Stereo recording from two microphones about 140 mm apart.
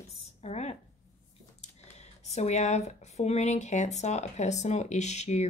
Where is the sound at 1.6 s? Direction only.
50° left (ahead or behind).